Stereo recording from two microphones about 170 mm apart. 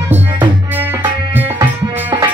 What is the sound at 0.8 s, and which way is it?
Tabla, 15° right (ahead or behind).